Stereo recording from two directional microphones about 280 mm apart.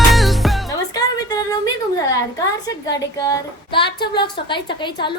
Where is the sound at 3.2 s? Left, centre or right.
Centre.